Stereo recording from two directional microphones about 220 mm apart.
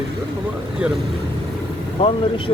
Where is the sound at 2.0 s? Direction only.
25° left (ahead or behind).